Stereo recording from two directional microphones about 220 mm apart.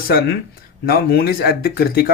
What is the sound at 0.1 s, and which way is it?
Speech, 45° left (ahead or behind).